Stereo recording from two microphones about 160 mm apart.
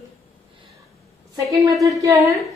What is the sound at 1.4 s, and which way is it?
Speech, 20° right (ahead or behind).